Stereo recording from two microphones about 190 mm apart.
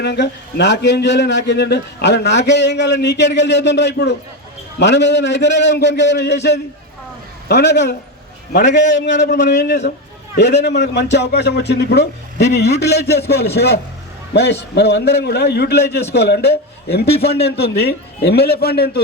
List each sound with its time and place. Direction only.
0.0 s a man's voice: 60° left (ahead or behind)
14.8 s a man's voice: 60° left (ahead or behind)